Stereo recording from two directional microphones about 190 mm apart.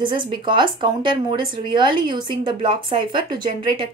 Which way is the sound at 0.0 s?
25° right (ahead or behind).